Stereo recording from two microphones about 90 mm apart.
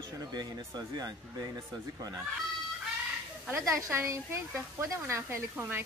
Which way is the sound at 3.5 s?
30° right (ahead or behind).